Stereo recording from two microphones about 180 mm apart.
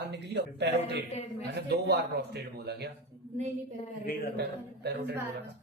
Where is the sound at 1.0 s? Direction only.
35° left (ahead or behind).